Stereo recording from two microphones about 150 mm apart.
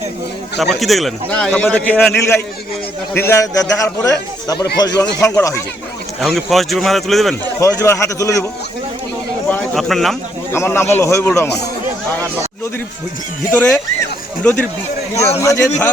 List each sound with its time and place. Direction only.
0.6 s a man's voice: centre (ahead or behind); by 5.6 s 20° left (ahead or behind)
6.1 s a man's voice: centre (ahead or behind)
7.6 s a man's voice: 20° left (ahead or behind)
9.7 s a man's voice: centre (ahead or behind)
10.5 s a man's voice: 15° left (ahead or behind)
13.5 s a man's voice: 15° left (ahead or behind)